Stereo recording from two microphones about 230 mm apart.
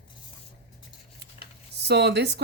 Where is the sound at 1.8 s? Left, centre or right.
Right.